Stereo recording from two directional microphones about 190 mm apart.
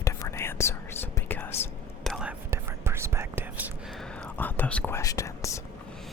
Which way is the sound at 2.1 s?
10° right (ahead or behind).